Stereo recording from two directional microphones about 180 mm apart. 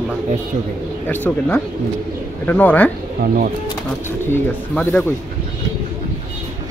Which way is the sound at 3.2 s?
55° right (ahead or behind).